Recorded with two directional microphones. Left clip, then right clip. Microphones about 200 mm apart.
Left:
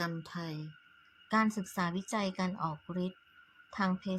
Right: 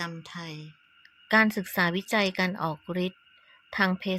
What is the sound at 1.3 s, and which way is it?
A woman's voice, 25° right (ahead or behind).